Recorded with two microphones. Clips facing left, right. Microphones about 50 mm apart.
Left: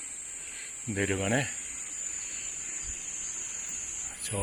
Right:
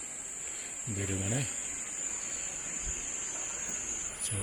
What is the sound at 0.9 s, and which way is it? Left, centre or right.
Speech, left.